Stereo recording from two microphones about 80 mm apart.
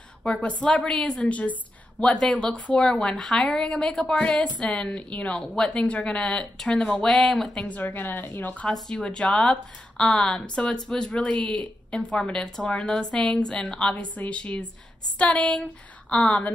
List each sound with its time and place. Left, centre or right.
0.2 s speech: centre
7.6 s a woman's voice: left
8.6 s speech: centre